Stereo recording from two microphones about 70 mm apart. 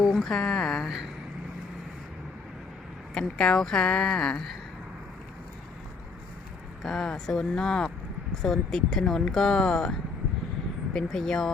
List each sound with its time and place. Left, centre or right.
0.0 s speech: centre
3.2 s speech: centre
6.8 s speech: centre